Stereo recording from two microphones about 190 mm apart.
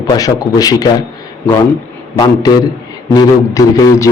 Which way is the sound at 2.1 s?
20° left (ahead or behind).